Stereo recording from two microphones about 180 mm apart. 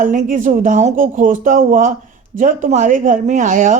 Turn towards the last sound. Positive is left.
turn(degrees=-45)  # may be behind; listen again after turning